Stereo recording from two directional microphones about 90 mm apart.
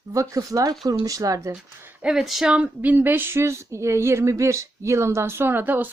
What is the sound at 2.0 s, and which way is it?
Speech, 5° right (ahead or behind).